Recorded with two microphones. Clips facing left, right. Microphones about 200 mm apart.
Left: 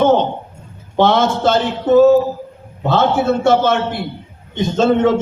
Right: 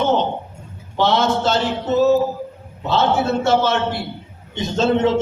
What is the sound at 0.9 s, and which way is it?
A man's voice, 50° left (ahead or behind).